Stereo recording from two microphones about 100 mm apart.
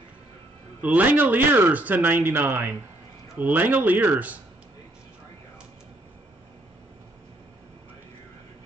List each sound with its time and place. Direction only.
0.7 s a man's voice: 15° right (ahead or behind)